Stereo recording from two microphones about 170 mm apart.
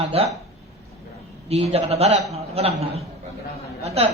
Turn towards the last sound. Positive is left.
turn(degrees=-35)  # may be behind; listen again after turning